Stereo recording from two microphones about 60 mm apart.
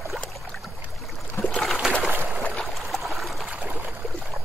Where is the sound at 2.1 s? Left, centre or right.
Right.